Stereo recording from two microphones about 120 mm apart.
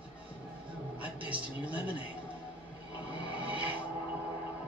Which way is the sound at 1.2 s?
10° right (ahead or behind).